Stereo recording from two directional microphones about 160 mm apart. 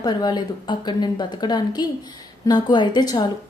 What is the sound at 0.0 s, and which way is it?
A woman's voice, 25° left (ahead or behind).